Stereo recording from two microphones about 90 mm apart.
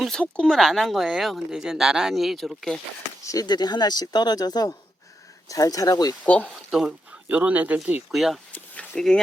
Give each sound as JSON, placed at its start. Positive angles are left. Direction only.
{"t": 0.0, "sound": "speech", "side_deg": 10}
{"t": 3.2, "sound": "speech", "side_deg": 45}
{"t": 6.2, "sound": "speech", "side_deg": 15}
{"t": 6.7, "sound": "speech", "side_deg": -10}
{"t": 8.1, "sound": "speech", "side_deg": 0}
{"t": 8.5, "sound": "speech", "side_deg": 15}